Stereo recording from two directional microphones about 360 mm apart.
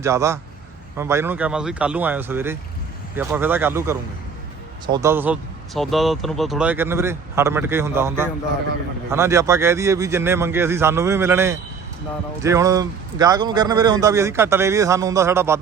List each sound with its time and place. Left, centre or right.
0.0 s speech: centre